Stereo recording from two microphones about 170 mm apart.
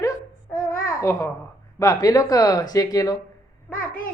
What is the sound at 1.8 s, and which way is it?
Speech, 20° left (ahead or behind).